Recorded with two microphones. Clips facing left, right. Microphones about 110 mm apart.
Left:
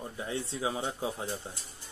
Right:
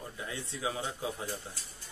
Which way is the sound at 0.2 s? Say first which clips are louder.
Left 4 dB; 30° left (ahead or behind).